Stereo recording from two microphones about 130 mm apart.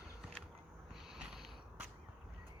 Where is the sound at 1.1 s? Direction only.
5° right (ahead or behind).